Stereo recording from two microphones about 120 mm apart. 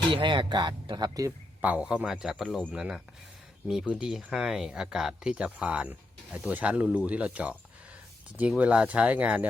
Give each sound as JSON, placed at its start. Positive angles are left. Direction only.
{"t": 0.1, "sound": "speech", "side_deg": -45}
{"t": 1.6, "sound": "a man's voice", "side_deg": -10}